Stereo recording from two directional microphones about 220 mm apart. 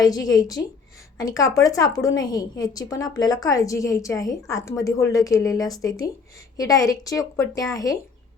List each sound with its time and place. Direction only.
0.0 s a woman's voice: 15° left (ahead or behind)